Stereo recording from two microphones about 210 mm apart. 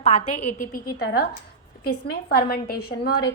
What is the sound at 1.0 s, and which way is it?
A woman's voice, 50° left (ahead or behind).